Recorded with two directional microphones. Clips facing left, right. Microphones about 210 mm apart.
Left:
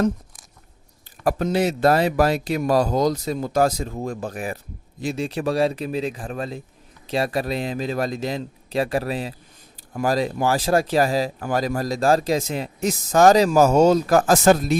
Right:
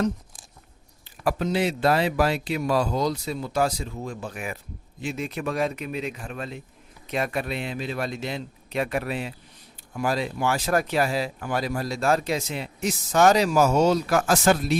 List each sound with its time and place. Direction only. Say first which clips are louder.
1.2 s speech: left 3 dB; 45° left (ahead or behind)